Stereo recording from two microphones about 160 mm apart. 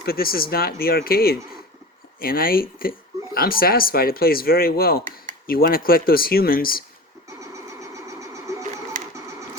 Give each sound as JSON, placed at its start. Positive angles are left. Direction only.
{"t": 0.0, "sound": "speech", "side_deg": 70}
{"t": 7.5, "sound": "vehicle", "side_deg": -20}